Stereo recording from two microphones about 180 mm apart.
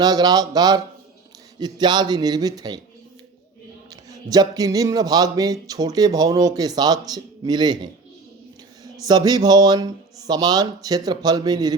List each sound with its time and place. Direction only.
0.0 s speech: 20° right (ahead or behind)
4.1 s speech: 20° right (ahead or behind)
9.0 s speech: 20° right (ahead or behind)